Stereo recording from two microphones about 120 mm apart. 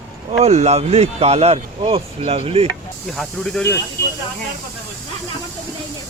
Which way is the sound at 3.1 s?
5° left (ahead or behind).